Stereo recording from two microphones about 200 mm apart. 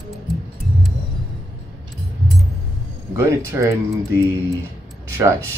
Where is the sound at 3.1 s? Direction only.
15° right (ahead or behind).